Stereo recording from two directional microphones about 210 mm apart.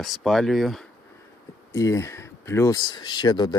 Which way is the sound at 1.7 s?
15° left (ahead or behind).